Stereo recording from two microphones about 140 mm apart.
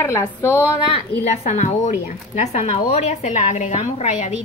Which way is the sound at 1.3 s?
60° left (ahead or behind).